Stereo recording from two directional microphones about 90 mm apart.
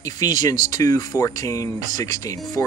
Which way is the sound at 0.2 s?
45° left (ahead or behind).